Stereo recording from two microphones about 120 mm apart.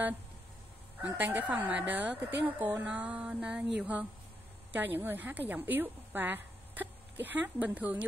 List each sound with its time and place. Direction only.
1.1 s a woman's voice: 15° right (ahead or behind)